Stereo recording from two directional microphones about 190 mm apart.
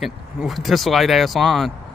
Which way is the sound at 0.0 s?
Centre (ahead or behind).